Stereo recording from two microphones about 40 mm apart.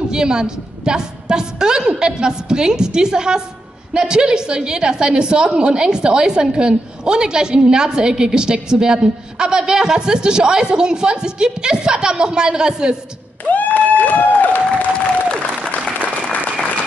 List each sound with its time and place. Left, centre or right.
0.1 s a woman's voice: centre
13.5 s a sound: left
15.2 s applause: left